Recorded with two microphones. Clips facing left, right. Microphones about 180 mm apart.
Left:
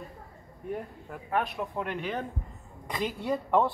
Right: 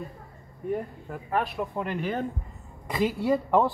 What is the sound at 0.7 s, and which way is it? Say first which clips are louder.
Speech: right 5 dB; centre (ahead or behind).